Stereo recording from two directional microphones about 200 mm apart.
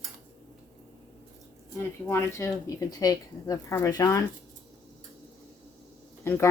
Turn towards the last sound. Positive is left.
turn(degrees=15)  # may be behind; listen again after turning